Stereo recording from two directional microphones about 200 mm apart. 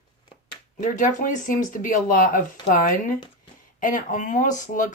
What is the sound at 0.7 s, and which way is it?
Speech, 40° left (ahead or behind).